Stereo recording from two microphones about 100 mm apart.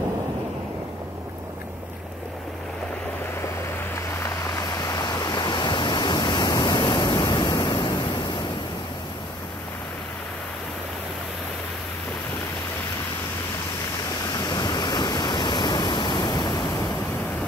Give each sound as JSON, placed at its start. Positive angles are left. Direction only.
{"t": 4.9, "sound": "waves", "side_deg": 40}
{"t": 14.3, "sound": "waves", "side_deg": 40}